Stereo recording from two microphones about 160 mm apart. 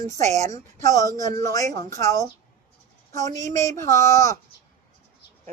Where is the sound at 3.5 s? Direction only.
20° left (ahead or behind).